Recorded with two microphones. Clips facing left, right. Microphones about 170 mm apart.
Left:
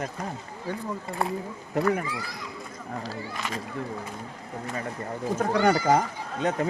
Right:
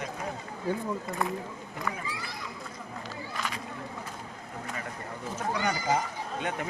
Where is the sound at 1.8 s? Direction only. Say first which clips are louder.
Left 12 dB; 75° left (ahead or behind).